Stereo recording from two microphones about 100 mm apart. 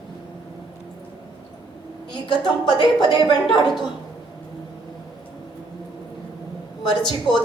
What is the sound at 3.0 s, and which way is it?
Speech, 50° left (ahead or behind).